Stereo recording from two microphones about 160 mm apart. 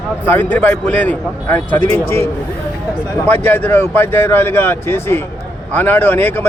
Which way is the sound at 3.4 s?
10° left (ahead or behind).